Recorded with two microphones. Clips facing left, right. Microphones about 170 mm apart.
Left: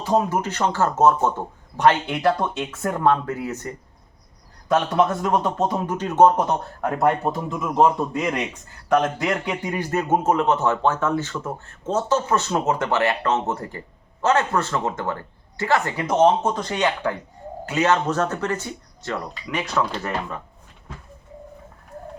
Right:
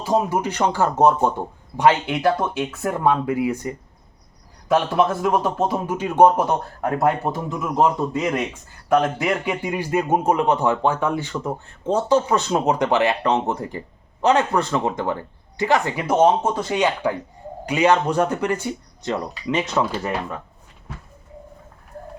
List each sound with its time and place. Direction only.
0.0 s a man's voice: 10° right (ahead or behind)
2.0 s a man's voice: 5° right (ahead or behind)
4.9 s a man's voice: 5° right (ahead or behind); by 19.9 s 20° right (ahead or behind)